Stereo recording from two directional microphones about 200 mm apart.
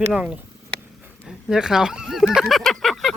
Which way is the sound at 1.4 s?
5° right (ahead or behind).